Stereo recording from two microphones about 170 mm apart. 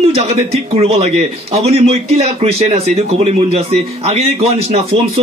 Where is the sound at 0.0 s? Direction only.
35° right (ahead or behind).